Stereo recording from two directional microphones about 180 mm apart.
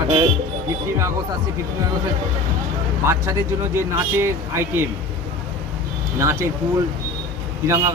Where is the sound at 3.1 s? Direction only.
15° right (ahead or behind).